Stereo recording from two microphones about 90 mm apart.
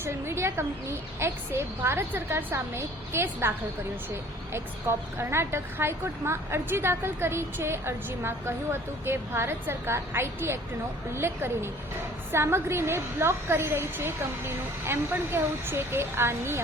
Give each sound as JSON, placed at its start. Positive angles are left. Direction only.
{"t": 0.0, "sound": "a woman's voice", "side_deg": -30}
{"t": 4.9, "sound": "a woman's voice", "side_deg": -25}